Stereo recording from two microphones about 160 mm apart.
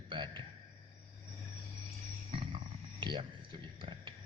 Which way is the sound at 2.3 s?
30° right (ahead or behind).